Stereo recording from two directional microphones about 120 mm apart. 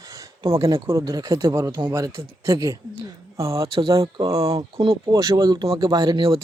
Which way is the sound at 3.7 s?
45° right (ahead or behind).